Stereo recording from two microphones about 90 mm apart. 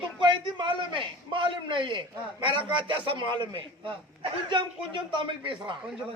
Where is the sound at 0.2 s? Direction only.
65° right (ahead or behind).